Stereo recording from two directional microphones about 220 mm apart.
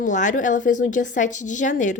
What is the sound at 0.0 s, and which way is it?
Speech, 35° left (ahead or behind).